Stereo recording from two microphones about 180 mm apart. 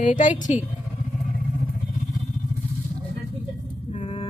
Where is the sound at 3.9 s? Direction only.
35° left (ahead or behind).